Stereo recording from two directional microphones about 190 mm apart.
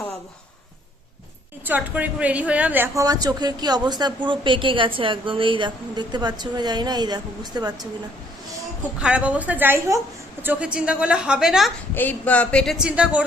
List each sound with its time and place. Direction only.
1.6 s a woman's voice: 10° right (ahead or behind)
9.0 s a woman's voice: 5° right (ahead or behind)